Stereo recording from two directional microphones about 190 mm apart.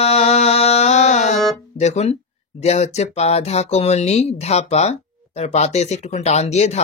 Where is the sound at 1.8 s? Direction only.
35° left (ahead or behind).